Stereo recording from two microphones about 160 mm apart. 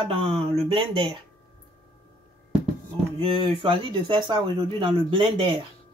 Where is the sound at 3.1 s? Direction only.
35° right (ahead or behind).